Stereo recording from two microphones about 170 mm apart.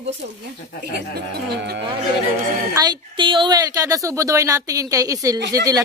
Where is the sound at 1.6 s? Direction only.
75° right (ahead or behind).